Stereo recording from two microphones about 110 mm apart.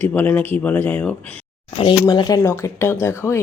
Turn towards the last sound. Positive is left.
turn(degrees=25)  # may be behind; listen again after turning